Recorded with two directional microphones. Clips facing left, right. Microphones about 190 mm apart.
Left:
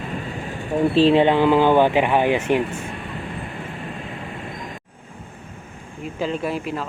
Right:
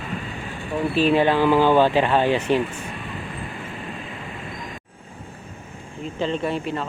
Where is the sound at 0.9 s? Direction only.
25° left (ahead or behind).